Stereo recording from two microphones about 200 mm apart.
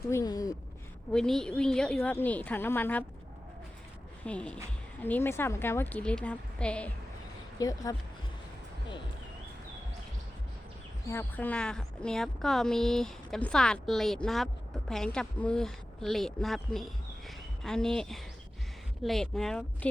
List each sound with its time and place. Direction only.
0.1 s a woman's voice: 15° left (ahead or behind)
1.1 s a woman's voice: 5° left (ahead or behind)
4.3 s a woman's voice: 5° left (ahead or behind)
7.6 s a woman's voice: 20° left (ahead or behind)
11.0 s a woman's voice: 10° left (ahead or behind)